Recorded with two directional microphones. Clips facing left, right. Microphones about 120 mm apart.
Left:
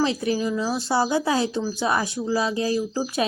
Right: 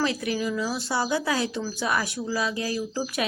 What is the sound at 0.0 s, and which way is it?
Speech, 30° left (ahead or behind).